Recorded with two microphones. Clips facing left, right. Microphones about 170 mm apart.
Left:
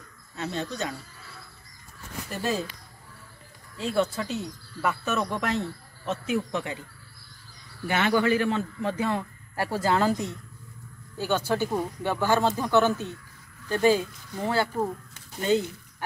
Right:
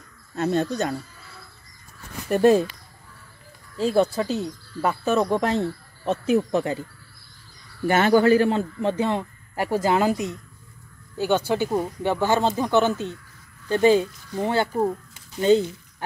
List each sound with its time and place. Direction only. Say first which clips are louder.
0.4 s speech: right 8 dB; 45° right (ahead or behind)
2.2 s speech: right 13 dB; 55° right (ahead or behind)
3.7 s speech: right 6 dB; 35° right (ahead or behind)
7.8 s a man's voice: right 6 dB; 40° right (ahead or behind); by 14.9 s 25° right (ahead or behind)